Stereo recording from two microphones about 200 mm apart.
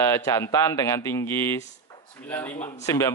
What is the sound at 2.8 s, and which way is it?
Speech, 15° left (ahead or behind).